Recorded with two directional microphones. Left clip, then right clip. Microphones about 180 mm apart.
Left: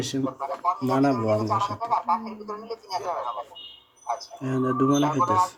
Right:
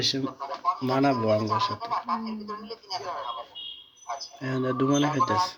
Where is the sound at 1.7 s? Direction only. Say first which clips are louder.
Left 5 dB; 50° left (ahead or behind).